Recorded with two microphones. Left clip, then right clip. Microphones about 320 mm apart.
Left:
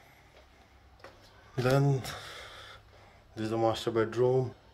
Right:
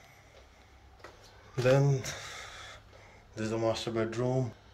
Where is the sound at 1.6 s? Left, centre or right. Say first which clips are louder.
Right 2 dB; centre.